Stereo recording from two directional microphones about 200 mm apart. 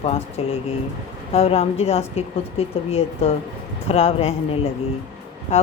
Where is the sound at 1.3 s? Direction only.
30° left (ahead or behind).